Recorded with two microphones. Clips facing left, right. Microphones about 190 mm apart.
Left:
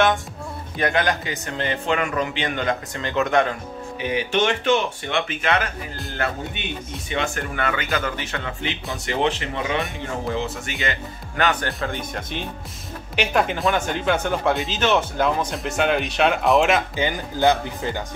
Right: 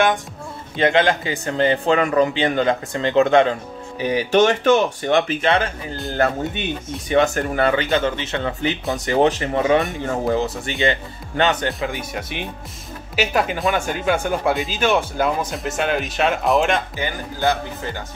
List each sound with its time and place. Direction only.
0.7 s speech: 25° right (ahead or behind)
4.0 s speech: 40° right (ahead or behind)
7.1 s speech: 40° right (ahead or behind)
8.9 s speech: 40° right (ahead or behind)
10.8 s speech: 25° right (ahead or behind)
11.9 s speech: 10° right (ahead or behind)
16.9 s speech: 20° left (ahead or behind)